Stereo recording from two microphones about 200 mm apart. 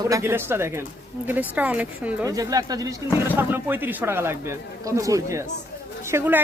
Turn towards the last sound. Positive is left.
turn(degrees=-10)  # may be behind; listen again after turning